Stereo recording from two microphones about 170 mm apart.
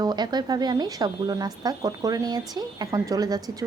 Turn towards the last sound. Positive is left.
turn(degrees=-20)  # may be behind; listen again after turning